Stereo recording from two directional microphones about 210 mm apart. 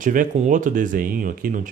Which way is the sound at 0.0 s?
40° right (ahead or behind).